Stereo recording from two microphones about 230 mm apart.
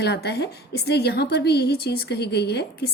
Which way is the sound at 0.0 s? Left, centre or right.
Left.